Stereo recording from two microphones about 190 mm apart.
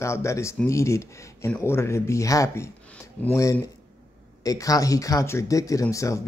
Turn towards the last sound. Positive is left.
turn(degrees=15)  # may be behind; listen again after turning